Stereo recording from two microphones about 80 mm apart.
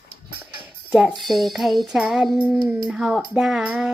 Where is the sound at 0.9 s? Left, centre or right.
Centre.